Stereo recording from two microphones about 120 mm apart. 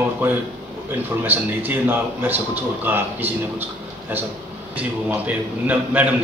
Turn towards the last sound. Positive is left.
turn(degrees=-15)  # may be behind; listen again after turning